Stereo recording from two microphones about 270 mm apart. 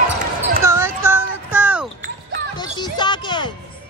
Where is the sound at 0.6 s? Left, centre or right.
Centre.